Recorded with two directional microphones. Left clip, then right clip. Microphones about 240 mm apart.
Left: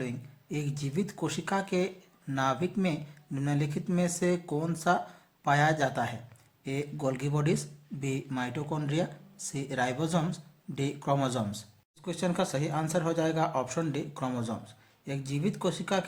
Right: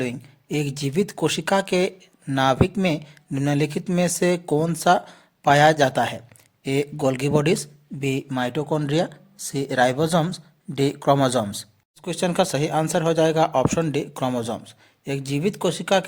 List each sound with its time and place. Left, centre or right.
0.0 s speech: right